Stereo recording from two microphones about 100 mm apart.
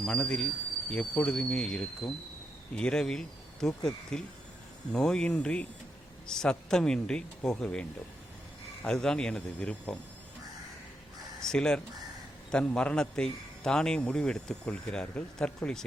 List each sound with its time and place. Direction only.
0.0 s a man's voice: 10° left (ahead or behind)
11.3 s a man's voice: 5° left (ahead or behind)